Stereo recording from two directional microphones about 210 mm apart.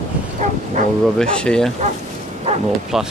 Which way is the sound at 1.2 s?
5° left (ahead or behind).